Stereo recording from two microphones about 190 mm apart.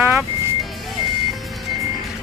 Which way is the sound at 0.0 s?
10° right (ahead or behind).